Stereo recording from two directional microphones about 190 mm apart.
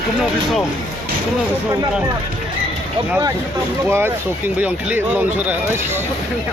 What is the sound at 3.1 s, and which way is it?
Speech, 15° right (ahead or behind).